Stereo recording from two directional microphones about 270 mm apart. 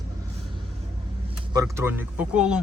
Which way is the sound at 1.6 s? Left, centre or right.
Centre.